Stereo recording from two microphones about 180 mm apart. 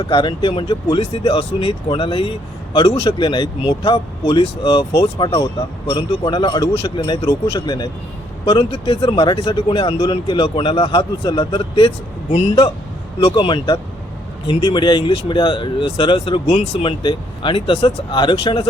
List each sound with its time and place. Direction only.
0.0 s speech: 30° left (ahead or behind)
5.3 s speech: 15° left (ahead or behind)
6.1 s speech: 30° left (ahead or behind)
8.4 s speech: 30° left (ahead or behind)